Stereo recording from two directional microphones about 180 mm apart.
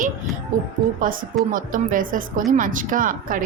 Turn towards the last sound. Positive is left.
turn(degrees=-50)  # may be behind; listen again after turning